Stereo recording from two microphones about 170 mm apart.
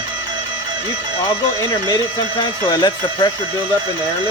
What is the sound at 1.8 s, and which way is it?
Speech, 25° left (ahead or behind).